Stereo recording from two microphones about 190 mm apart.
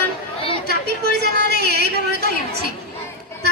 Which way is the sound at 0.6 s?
60° right (ahead or behind).